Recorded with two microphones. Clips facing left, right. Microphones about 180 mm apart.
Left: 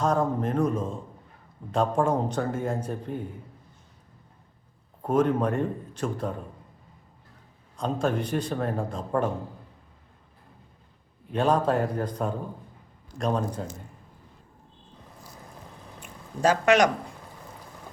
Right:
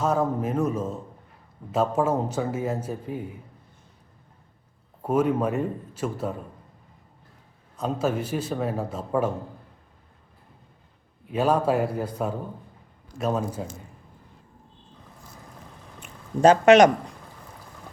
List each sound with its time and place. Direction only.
0.0 s a man's voice: 5° right (ahead or behind)
5.0 s a man's voice: 10° right (ahead or behind)
7.8 s a man's voice: 5° right (ahead or behind)
11.3 s a man's voice: 5° right (ahead or behind)
16.4 s speech: 20° right (ahead or behind)